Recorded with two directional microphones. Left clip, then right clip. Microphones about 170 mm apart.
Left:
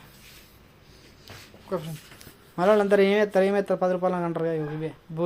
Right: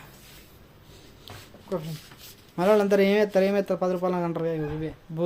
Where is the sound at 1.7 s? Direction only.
Centre (ahead or behind).